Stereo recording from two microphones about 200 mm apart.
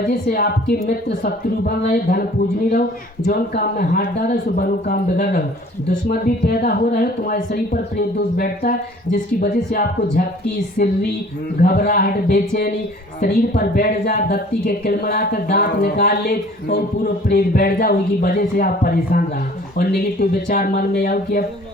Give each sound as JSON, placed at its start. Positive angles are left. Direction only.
{"t": 0.0, "sound": "speech", "side_deg": 45}
{"t": 3.2, "sound": "speech", "side_deg": 50}